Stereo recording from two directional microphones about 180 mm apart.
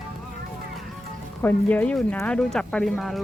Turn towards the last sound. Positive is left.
turn(degrees=0)  # may be behind; listen again after turning